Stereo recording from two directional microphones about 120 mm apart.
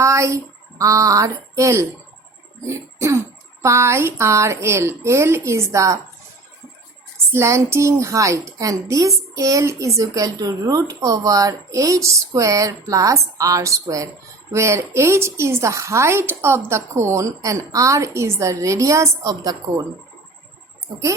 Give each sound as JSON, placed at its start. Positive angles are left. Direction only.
{"t": 0.0, "sound": "a woman's voice", "side_deg": -25}
{"t": 7.3, "sound": "a woman's voice", "side_deg": -25}